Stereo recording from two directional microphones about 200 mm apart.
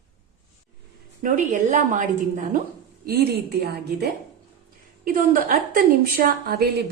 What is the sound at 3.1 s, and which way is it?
A woman's voice, 50° right (ahead or behind).